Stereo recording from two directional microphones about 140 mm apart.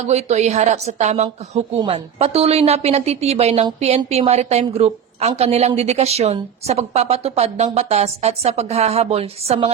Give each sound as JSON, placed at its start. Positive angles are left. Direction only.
{"t": 0.0, "sound": "a woman's voice", "side_deg": -50}
{"t": 1.8, "sound": "a woman's voice", "side_deg": -40}